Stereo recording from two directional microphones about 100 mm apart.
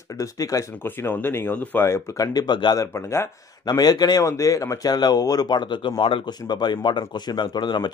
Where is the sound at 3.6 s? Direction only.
40° left (ahead or behind); by 6.3 s 60° left (ahead or behind).